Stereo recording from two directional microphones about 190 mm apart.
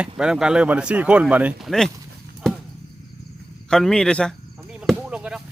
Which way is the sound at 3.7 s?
5° left (ahead or behind).